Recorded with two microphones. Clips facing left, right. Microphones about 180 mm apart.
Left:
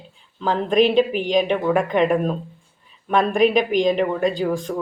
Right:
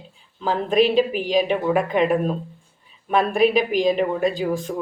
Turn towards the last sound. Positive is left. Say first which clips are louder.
# left 1 dB
turn(degrees=-5)  # may be behind; listen again after turning